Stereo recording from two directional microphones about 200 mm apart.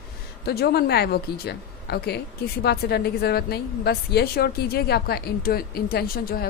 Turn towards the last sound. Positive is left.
turn(degrees=50)  # may be behind; listen again after turning